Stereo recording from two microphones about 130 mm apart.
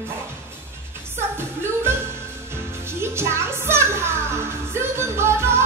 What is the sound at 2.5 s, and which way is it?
Music, 20° right (ahead or behind).